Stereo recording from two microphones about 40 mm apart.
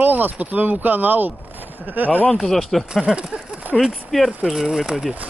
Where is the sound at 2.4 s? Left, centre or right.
Centre.